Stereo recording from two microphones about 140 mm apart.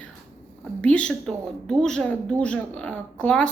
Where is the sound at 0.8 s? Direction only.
10° left (ahead or behind).